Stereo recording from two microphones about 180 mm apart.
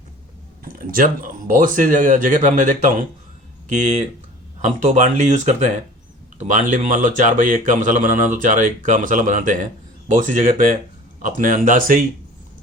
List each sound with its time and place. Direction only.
0.6 s speech: 50° right (ahead or behind)
4.6 s speech: 40° right (ahead or behind)